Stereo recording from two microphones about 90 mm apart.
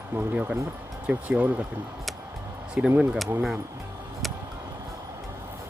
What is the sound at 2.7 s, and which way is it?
Speech, 15° right (ahead or behind).